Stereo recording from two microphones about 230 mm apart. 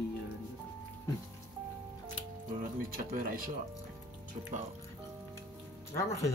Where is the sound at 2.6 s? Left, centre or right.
Right.